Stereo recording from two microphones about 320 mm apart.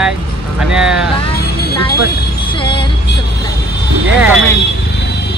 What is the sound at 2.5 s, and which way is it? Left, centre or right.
Music, centre.